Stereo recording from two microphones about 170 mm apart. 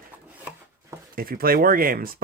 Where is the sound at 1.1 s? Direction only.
60° right (ahead or behind).